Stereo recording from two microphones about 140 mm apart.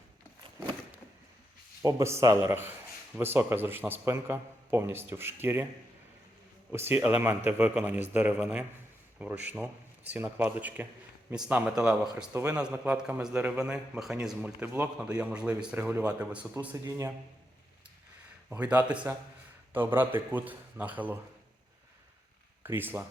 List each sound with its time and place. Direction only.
1.8 s a man's voice: 20° right (ahead or behind)
6.7 s a man's voice: 15° right (ahead or behind)
16.7 s a man's voice: 20° right (ahead or behind)
18.5 s a man's voice: 10° right (ahead or behind)
22.6 s speech: 15° right (ahead or behind)